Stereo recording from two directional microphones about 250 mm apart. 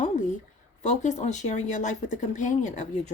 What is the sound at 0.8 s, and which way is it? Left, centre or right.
Speech, left.